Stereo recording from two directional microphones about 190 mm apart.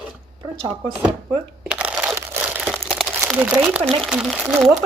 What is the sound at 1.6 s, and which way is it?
Shuffling cards, 5° right (ahead or behind).